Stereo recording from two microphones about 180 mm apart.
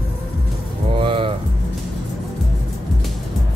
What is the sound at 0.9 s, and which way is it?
Music, 30° right (ahead or behind).